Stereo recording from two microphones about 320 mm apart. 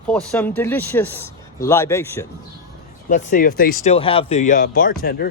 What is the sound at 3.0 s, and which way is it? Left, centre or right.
Speech, left.